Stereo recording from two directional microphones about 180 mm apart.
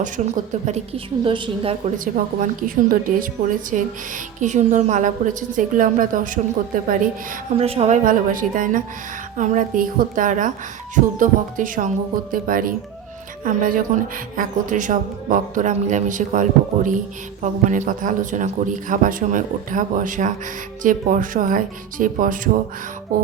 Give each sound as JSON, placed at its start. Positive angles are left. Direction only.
{"t": 0.2, "sound": "a woman's voice", "side_deg": -45}
{"t": 0.6, "sound": "a woman's voice", "side_deg": -35}
{"t": 2.1, "sound": "a woman's voice", "side_deg": -50}
{"t": 7.6, "sound": "a woman's voice", "side_deg": -35}